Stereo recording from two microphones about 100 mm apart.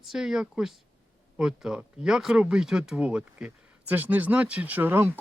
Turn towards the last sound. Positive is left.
turn(degrees=-20)  # may be behind; listen again after turning